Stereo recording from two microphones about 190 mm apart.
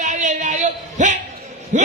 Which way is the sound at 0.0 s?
40° right (ahead or behind).